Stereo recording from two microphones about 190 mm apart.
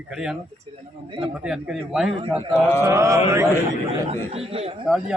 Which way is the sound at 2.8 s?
15° right (ahead or behind).